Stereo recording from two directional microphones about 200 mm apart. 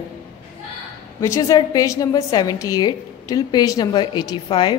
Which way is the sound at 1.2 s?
15° left (ahead or behind).